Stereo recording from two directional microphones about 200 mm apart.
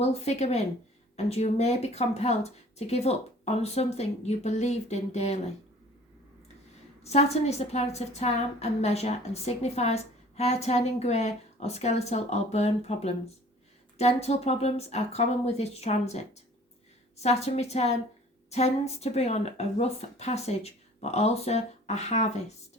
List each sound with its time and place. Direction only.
0.0 s a woman's voice: 35° left (ahead or behind)
7.0 s a woman's voice: 35° left (ahead or behind)